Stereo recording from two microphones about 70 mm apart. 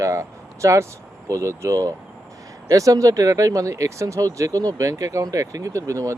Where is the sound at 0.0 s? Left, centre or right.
Right.